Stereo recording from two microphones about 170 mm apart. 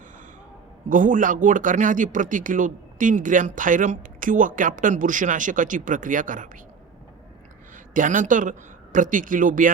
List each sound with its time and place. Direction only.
0.9 s speech: 50° right (ahead or behind)
7.9 s speech: 50° right (ahead or behind)